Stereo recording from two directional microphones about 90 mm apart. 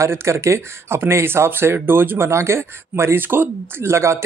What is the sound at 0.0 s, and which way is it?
Speech, 30° right (ahead or behind).